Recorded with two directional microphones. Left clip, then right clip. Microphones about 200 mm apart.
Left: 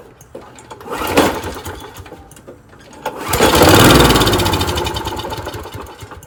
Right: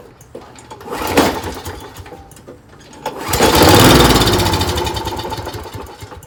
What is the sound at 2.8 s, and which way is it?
Lawn mower, centre (ahead or behind).